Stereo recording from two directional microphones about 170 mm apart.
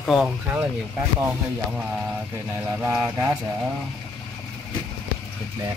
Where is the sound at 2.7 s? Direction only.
10° right (ahead or behind).